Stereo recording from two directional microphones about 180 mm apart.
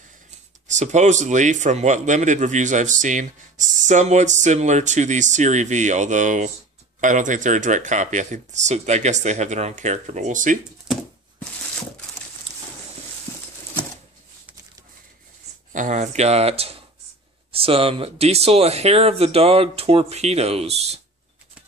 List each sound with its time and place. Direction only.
0.7 s a man's voice: 40° right (ahead or behind)
15.7 s speech: 45° right (ahead or behind)